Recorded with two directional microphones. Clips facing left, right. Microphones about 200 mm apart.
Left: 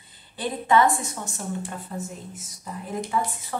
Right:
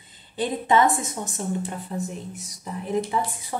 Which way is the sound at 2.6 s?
20° right (ahead or behind).